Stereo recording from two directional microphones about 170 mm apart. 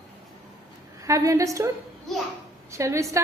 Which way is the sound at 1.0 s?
20° right (ahead or behind).